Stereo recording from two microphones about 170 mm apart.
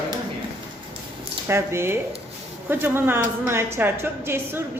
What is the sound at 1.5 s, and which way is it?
A woman's voice, 15° right (ahead or behind).